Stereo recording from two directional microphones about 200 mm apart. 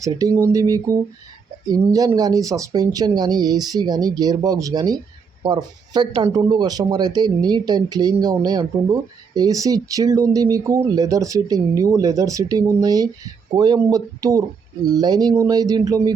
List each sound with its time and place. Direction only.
0.0 s speech: 15° right (ahead or behind)